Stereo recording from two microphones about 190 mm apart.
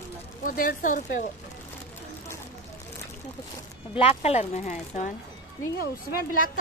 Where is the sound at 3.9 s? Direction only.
30° left (ahead or behind).